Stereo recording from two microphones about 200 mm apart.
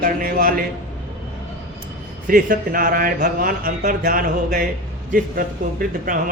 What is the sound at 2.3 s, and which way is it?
Speech, 45° right (ahead or behind).